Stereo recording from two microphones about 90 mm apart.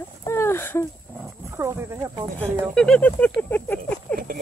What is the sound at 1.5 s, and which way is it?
Wild animals, 30° right (ahead or behind).